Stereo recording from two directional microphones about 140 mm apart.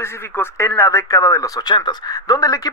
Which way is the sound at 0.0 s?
20° left (ahead or behind).